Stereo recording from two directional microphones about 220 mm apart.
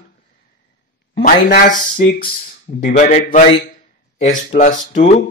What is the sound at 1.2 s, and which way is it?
Speech, 40° left (ahead or behind).